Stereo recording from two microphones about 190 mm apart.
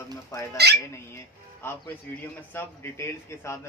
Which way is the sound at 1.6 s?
10° left (ahead or behind).